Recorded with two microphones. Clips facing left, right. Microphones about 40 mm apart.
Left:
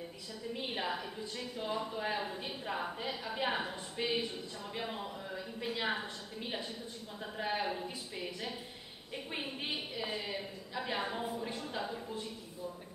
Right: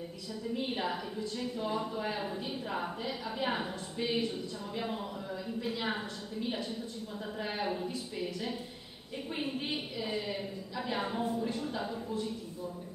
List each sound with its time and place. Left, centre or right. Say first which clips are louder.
0.7 s a woman's voice: right 2 dB; centre
1.2 s a woman's voice: right 5 dB; centre
1.7 s a woman's voice: left 1 dB; centre
4.0 s a woman's voice: right 1 dB; centre
4.7 s a woman's voice: right 3 dB; centre
7.2 s a woman's voice: left 1 dB; centre
10.1 s a woman's voice: right 3 dB; centre
10.7 s a woman's voice: right 1 dB; centre